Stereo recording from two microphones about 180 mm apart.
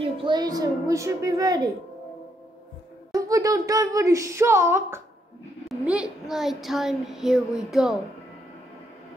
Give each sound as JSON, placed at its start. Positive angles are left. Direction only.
{"t": 0.0, "sound": "a woman's voice", "side_deg": -25}
{"t": 3.1, "sound": "speech", "side_deg": -20}
{"t": 5.7, "sound": "a sound", "side_deg": -5}